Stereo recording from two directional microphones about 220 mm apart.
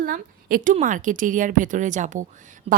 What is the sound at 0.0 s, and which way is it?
A woman's voice, 40° right (ahead or behind).